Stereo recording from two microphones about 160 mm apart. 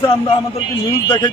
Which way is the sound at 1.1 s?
30° left (ahead or behind).